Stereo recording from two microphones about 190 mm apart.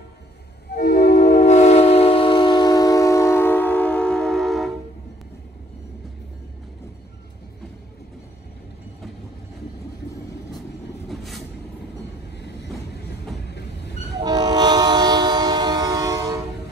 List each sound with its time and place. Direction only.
0.7 s music: 45° left (ahead or behind); by 4.7 s centre (ahead or behind)
11.1 s vehicle: centre (ahead or behind)
14.2 s train: 20° right (ahead or behind)